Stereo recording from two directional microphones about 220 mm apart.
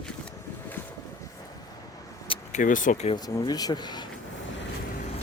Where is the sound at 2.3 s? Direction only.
35° left (ahead or behind).